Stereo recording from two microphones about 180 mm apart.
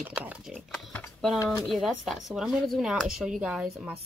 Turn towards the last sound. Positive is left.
turn(degrees=-5)  # may be behind; listen again after turning